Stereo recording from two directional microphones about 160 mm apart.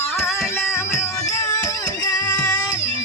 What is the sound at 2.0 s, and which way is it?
Music, 15° left (ahead or behind).